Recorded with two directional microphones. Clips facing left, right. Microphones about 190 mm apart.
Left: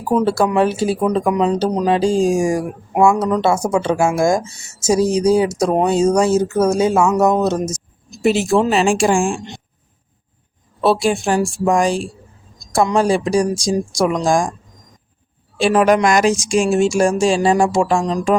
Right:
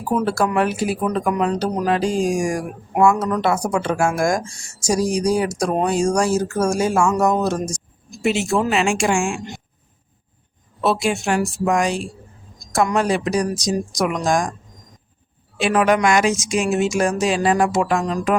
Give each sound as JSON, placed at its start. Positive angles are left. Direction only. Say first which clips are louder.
{"t": 0.2, "sound": "speech", "louder": "left 4 dB", "side_deg": 25}
{"t": 4.4, "sound": "speech", "louder": "even", "side_deg": 5}
{"t": 4.9, "sound": "speech", "louder": "left 5 dB", "side_deg": 25}
{"t": 8.2, "sound": "speech", "louder": "left 4 dB", "side_deg": 35}
{"t": 10.8, "sound": "speech", "louder": "left 4 dB", "side_deg": 35}
{"t": 15.5, "sound": "speech", "louder": "left 4 dB", "side_deg": 30}